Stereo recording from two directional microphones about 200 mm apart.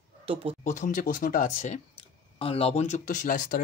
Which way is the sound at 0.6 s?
40° left (ahead or behind).